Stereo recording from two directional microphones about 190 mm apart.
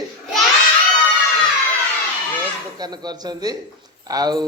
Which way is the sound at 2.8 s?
20° right (ahead or behind).